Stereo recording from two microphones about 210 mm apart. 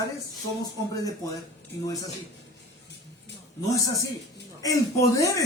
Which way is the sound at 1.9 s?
15° left (ahead or behind).